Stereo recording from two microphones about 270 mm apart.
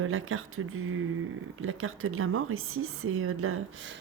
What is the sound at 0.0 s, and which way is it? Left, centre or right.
A woman's voice, right.